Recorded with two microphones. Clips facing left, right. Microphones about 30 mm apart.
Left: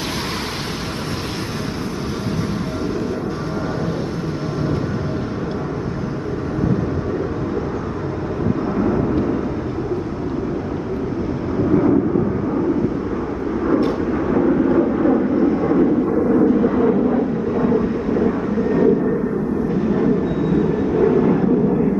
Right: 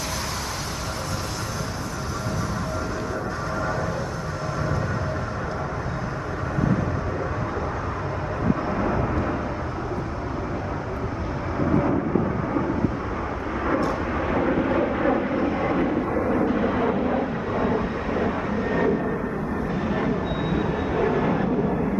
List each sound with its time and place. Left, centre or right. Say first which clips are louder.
8.7 s vehicle: left 6 dB; centre
14.2 s vehicle: left 6 dB; right
15.3 s vehicle: left 7 dB; centre